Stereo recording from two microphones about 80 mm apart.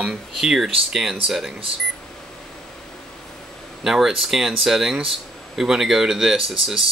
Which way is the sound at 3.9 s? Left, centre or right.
Centre.